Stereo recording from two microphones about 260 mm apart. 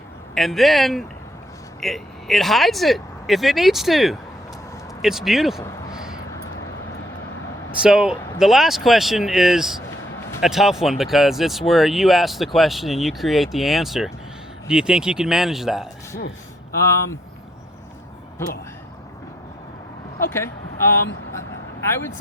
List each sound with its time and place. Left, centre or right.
0.3 s speech: centre
7.8 s speech: centre
20.3 s speech: centre